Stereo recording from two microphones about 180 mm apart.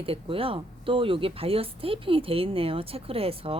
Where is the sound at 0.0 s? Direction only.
30° right (ahead or behind).